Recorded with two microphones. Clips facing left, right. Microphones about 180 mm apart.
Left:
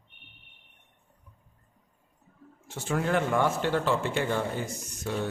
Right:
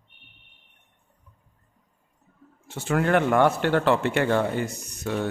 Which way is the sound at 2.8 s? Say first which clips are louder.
Right 5 dB; 65° right (ahead or behind).